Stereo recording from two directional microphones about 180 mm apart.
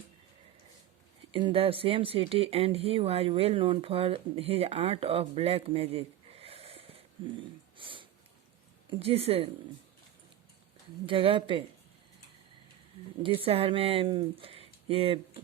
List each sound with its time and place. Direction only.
1.3 s speech: 25° right (ahead or behind)
7.8 s sniff: 30° right (ahead or behind)
8.9 s speech: 35° right (ahead or behind)
11.0 s speech: 30° right (ahead or behind)
13.2 s speech: 30° right (ahead or behind)